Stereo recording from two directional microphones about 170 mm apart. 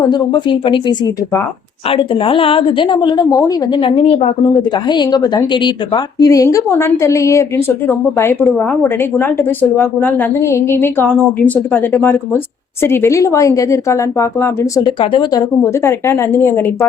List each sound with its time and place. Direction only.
0.1 s a woman's voice: 25° left (ahead or behind)
14.8 s a woman's voice: 30° left (ahead or behind)